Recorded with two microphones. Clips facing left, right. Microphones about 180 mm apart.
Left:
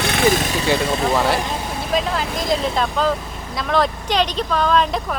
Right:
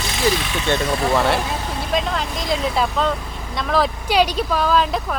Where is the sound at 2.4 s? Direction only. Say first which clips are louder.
Even; 5° right (ahead or behind).